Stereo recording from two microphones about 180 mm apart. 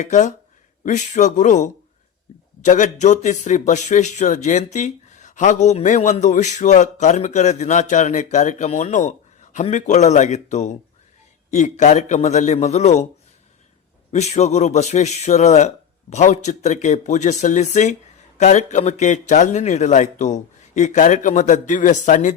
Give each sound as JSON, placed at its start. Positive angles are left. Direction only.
{"t": 0.0, "sound": "speech", "side_deg": 40}
{"t": 14.1, "sound": "speech", "side_deg": 40}